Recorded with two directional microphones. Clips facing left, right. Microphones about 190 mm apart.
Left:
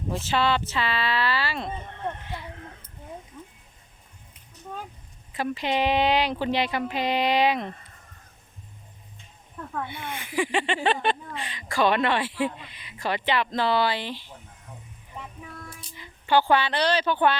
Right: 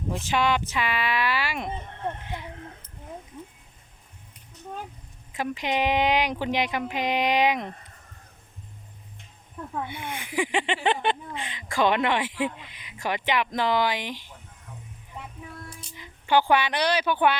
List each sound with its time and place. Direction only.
0.1 s speech: 15° right (ahead or behind)
5.3 s speech: 15° right (ahead or behind)
9.6 s speech: 15° right (ahead or behind)
16.0 s speech: 15° right (ahead or behind)